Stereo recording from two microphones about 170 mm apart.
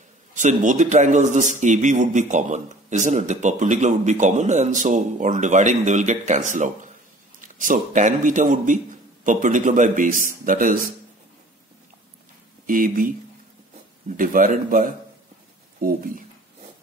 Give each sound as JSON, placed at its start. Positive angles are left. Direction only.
{"t": 0.4, "sound": "a man's voice", "side_deg": -45}
{"t": 12.6, "sound": "a man's voice", "side_deg": -55}
{"t": 14.1, "sound": "a man's voice", "side_deg": -55}